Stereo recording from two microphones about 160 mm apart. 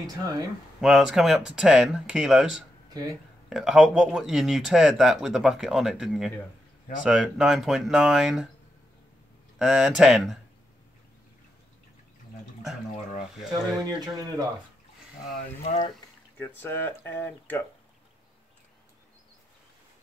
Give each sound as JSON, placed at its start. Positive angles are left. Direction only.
{"t": 0.0, "sound": "speech", "side_deg": -25}
{"t": 0.7, "sound": "speech", "side_deg": 0}
{"t": 2.9, "sound": "speech", "side_deg": -25}
{"t": 3.4, "sound": "speech", "side_deg": -5}
{"t": 9.6, "sound": "speech", "side_deg": -5}
{"t": 13.5, "sound": "speech", "side_deg": -25}
{"t": 16.3, "sound": "speech", "side_deg": 15}